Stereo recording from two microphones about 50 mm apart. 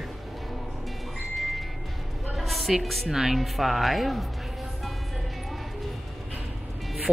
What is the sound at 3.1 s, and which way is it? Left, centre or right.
A woman's voice, centre.